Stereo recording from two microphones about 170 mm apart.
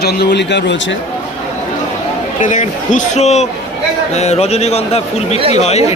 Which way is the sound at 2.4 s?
50° left (ahead or behind).